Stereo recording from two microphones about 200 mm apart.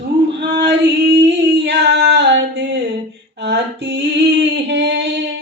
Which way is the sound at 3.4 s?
60° right (ahead or behind).